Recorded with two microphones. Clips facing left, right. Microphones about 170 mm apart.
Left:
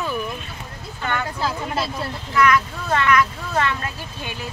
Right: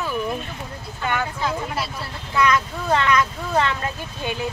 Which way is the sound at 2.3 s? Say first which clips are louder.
Left 1 dB; 20° right (ahead or behind).